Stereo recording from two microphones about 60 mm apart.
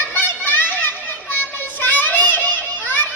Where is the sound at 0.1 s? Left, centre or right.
Left.